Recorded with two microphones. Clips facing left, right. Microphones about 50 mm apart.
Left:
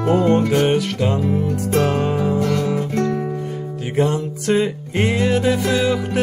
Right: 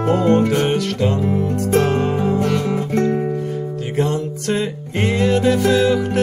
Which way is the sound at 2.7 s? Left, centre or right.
Right.